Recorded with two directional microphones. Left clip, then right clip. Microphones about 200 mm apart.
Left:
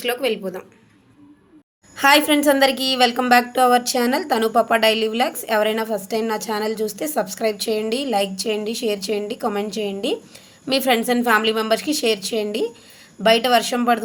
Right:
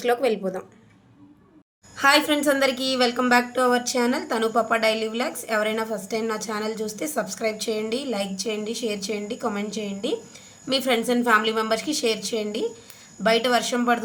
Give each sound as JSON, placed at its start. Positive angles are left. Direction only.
{"t": 0.0, "sound": "a woman's voice", "side_deg": -10}
{"t": 2.0, "sound": "a woman's voice", "side_deg": 30}